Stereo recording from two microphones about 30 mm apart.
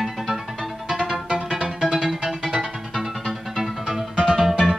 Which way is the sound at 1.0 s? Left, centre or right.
Right.